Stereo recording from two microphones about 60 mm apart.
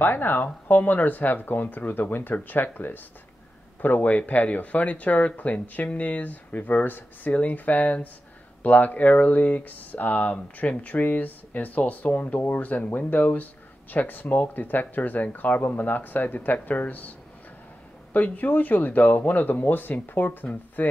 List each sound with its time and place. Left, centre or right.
0.0 s speech: left
18.1 s speech: left